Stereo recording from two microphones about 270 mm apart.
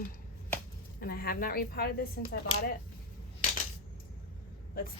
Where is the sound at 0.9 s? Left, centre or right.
Left.